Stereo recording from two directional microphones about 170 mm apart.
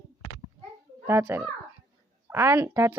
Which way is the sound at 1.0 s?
15° right (ahead or behind).